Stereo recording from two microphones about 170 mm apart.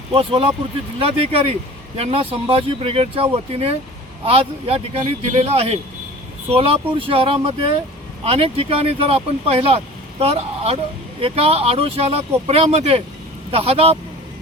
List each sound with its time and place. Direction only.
0.1 s speech: 35° right (ahead or behind)